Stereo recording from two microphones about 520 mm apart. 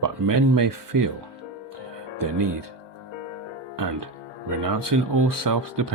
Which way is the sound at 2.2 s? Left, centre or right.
Right.